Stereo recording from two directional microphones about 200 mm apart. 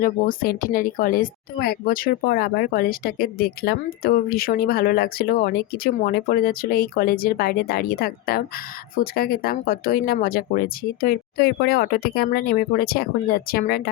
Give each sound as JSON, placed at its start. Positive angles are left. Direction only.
{"t": 0.0, "sound": "a woman's voice", "side_deg": 45}